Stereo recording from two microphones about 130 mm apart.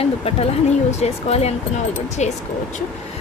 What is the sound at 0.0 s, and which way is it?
Speech, 50° left (ahead or behind).